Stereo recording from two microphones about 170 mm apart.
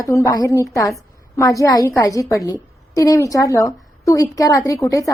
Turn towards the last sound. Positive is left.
turn(degrees=20)  # may be behind; listen again after turning